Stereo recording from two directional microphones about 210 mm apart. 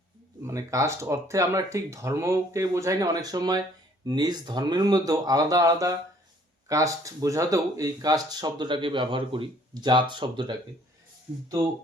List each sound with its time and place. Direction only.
0.4 s speech: 15° right (ahead or behind)